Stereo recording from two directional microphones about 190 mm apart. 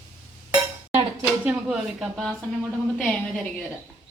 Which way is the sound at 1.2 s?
5° right (ahead or behind).